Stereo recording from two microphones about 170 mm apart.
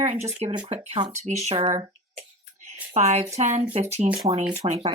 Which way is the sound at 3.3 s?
40° right (ahead or behind).